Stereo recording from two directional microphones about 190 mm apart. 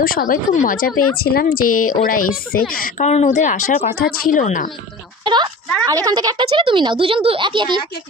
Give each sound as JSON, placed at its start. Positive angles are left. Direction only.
{"t": 0.0, "sound": "a woman's voice", "side_deg": 50}
{"t": 3.1, "sound": "a woman's voice", "side_deg": 35}
{"t": 5.2, "sound": "a woman's voice", "side_deg": -25}